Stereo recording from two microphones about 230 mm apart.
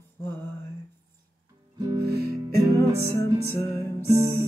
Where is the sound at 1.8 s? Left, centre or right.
Centre.